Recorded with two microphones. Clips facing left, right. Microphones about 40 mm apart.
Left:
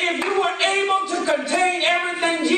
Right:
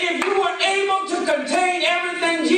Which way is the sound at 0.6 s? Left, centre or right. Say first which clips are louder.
Even; left.